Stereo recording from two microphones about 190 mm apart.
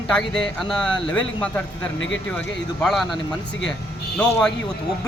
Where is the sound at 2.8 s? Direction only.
Centre (ahead or behind).